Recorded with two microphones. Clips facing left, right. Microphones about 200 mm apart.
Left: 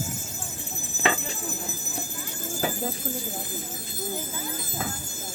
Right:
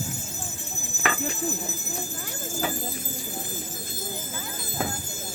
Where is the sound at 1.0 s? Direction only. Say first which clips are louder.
Left 3 dB; 25° left (ahead or behind).